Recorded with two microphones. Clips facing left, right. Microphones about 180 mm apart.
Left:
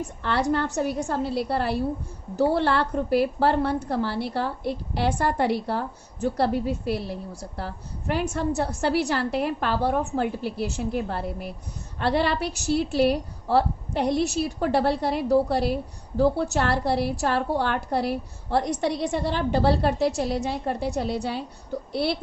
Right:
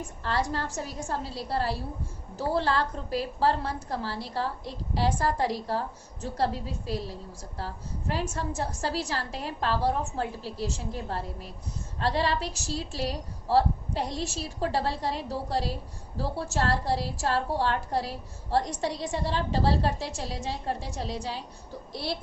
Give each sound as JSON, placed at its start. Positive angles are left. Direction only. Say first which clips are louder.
{"t": 0.0, "sound": "a woman's voice", "louder": "left 5 dB", "side_deg": 70}